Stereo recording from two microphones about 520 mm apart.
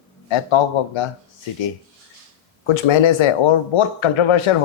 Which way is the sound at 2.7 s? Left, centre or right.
Left.